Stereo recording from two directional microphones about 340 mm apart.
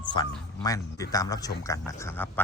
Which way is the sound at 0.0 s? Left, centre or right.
Centre.